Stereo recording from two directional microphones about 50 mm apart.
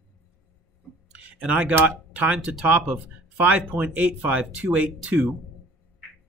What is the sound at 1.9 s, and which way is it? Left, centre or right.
Speech, right.